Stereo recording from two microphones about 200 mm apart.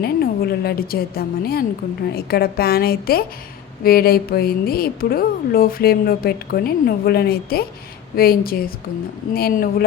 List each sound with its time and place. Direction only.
0.0 s speech: 50° left (ahead or behind)